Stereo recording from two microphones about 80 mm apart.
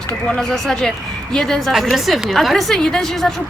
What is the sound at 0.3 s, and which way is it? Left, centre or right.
A woman's voice, centre.